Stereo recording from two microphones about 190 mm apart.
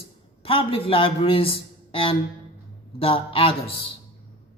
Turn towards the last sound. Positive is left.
turn(degrees=30)  # may be behind; listen again after turning